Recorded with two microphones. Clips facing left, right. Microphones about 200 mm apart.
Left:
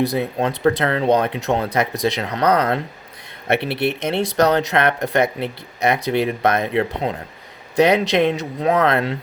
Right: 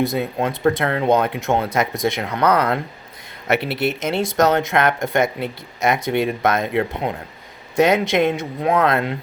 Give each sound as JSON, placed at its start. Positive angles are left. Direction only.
{"t": 0.0, "sound": "speech", "side_deg": 30}